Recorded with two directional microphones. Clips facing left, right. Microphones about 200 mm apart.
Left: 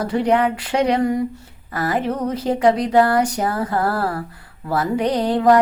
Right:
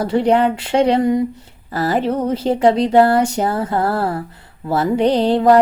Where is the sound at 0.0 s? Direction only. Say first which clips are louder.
Right 3 dB; 30° right (ahead or behind).